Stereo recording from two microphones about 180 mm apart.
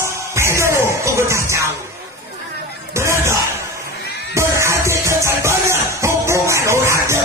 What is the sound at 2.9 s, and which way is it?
Music, 15° right (ahead or behind).